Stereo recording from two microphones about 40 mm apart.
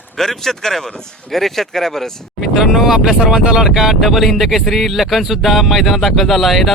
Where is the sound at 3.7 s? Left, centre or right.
Centre.